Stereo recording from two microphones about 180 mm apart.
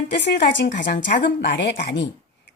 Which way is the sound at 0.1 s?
70° left (ahead or behind).